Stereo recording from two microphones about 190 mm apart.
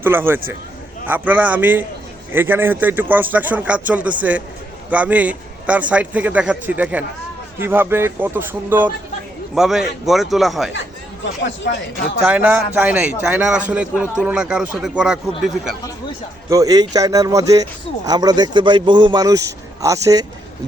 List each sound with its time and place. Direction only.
0.0 s a man's voice: 10° right (ahead or behind)
11.6 s speech: 65° left (ahead or behind)
12.2 s a man's voice: 5° right (ahead or behind)
16.5 s speech: 20° right (ahead or behind)